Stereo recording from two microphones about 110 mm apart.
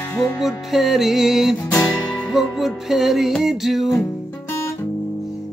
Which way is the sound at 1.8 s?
35° left (ahead or behind).